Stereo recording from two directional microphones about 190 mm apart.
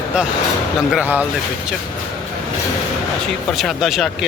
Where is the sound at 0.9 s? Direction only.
5° right (ahead or behind).